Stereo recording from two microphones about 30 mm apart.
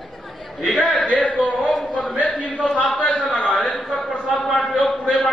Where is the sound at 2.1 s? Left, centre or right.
Left.